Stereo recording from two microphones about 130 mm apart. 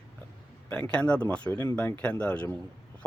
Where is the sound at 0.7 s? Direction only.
10° left (ahead or behind).